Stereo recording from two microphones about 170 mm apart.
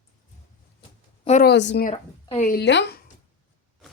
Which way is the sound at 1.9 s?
45° left (ahead or behind).